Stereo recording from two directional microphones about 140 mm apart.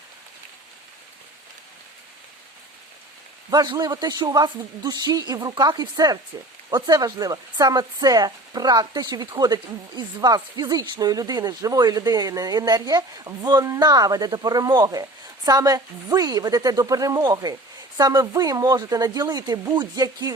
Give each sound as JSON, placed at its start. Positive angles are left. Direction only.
{"t": 3.5, "sound": "speech", "side_deg": -30}